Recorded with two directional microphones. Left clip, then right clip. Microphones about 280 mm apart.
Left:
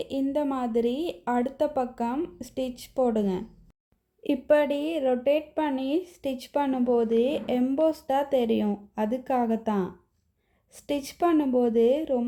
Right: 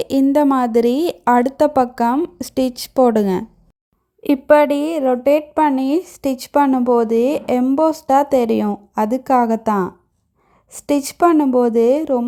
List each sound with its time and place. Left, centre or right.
0.0 s a woman's voice: right
4.2 s a woman's voice: centre